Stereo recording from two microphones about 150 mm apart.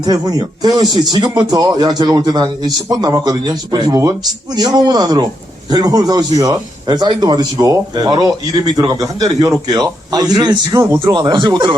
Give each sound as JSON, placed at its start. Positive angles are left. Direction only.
{"t": 0.0, "sound": "speech", "side_deg": -25}